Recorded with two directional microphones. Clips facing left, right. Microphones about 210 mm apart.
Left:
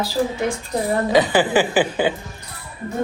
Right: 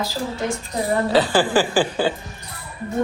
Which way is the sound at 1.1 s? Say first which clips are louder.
Left 2 dB; 20° left (ahead or behind).